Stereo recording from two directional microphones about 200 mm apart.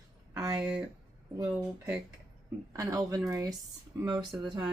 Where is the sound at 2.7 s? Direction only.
15° right (ahead or behind).